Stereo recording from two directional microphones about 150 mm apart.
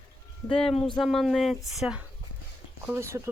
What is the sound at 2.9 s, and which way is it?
Speech, 20° right (ahead or behind).